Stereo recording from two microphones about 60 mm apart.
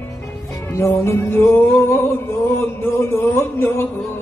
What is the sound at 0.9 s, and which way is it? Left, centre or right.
Music, left.